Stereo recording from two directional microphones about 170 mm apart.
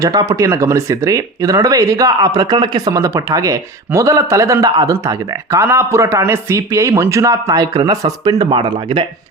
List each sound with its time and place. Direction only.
0.0 s speech: 20° right (ahead or behind)